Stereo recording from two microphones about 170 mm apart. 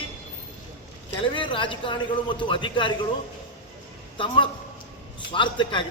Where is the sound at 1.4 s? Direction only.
30° left (ahead or behind).